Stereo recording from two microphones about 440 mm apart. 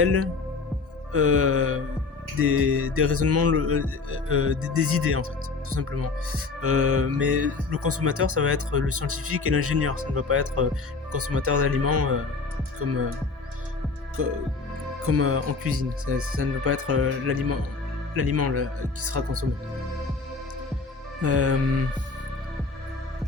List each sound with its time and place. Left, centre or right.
0.0 s speech: right
14.2 s speech: right
21.2 s speech: right